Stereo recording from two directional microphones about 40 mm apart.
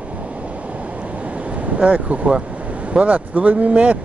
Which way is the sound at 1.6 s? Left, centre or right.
Right.